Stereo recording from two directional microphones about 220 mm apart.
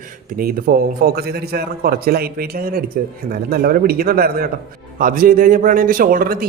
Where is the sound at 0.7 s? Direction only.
40° right (ahead or behind).